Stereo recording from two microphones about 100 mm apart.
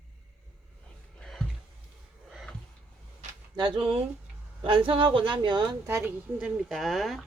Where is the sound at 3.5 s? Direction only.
50° right (ahead or behind).